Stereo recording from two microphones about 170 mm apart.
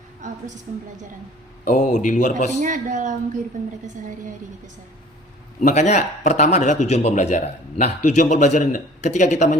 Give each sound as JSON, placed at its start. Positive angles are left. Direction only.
{"t": 0.2, "sound": "a sound", "side_deg": -45}
{"t": 1.6, "sound": "a man's voice", "side_deg": 45}
{"t": 2.5, "sound": "a man's voice", "side_deg": -45}
{"t": 5.5, "sound": "a man's voice", "side_deg": 45}